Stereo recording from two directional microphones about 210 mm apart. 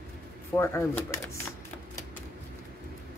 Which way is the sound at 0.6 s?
15° left (ahead or behind).